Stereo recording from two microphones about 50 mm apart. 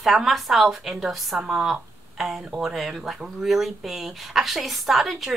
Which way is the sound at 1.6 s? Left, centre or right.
Centre.